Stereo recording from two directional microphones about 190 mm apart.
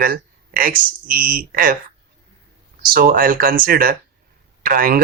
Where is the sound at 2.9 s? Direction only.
50° right (ahead or behind).